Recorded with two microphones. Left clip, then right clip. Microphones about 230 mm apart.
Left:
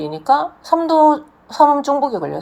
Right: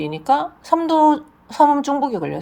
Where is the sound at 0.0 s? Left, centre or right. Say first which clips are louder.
Left 3 dB; right.